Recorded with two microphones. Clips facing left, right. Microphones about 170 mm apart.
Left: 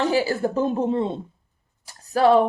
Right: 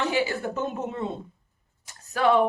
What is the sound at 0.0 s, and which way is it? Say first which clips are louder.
A woman's voice: left 5 dB; 35° left (ahead or behind).